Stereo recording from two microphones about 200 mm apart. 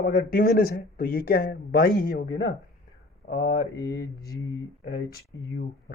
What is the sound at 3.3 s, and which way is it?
Mantra, 60° left (ahead or behind).